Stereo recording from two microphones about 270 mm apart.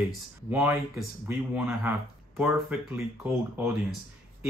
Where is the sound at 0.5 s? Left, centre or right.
Centre.